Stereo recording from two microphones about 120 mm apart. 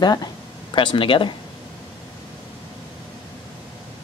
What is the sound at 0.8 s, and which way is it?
Speech, 45° left (ahead or behind).